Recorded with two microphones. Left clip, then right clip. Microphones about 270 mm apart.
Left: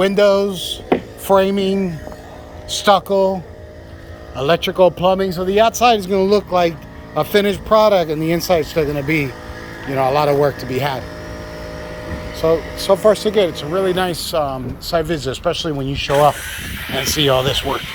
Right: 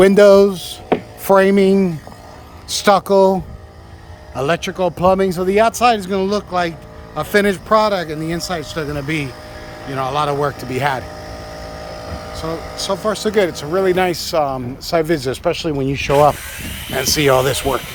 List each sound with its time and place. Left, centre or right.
0.0 s speech: right
0.5 s speech: centre
4.4 s speech: centre
5.0 s speech: right
12.4 s speech: centre
15.9 s speech: right
16.3 s speech: centre
17.0 s speech: centre